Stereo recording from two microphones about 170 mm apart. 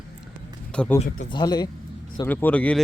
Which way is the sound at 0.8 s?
5° left (ahead or behind).